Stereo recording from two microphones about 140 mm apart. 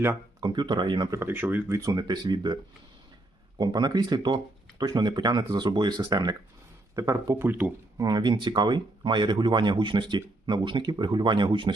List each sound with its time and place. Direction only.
0.3 s speech: 30° right (ahead or behind)
1.1 s speech: 15° right (ahead or behind); by 2.6 s 30° right (ahead or behind)
3.6 s speech: 30° right (ahead or behind); by 7.7 s 15° right (ahead or behind)
7.9 s speech: 30° right (ahead or behind)